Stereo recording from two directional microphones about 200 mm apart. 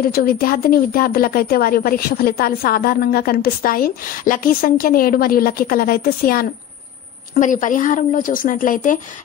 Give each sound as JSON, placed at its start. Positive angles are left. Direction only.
{"t": 0.1, "sound": "a woman's voice", "side_deg": 50}